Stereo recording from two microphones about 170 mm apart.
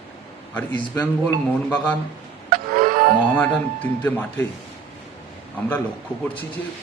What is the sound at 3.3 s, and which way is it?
Speech, 10° left (ahead or behind).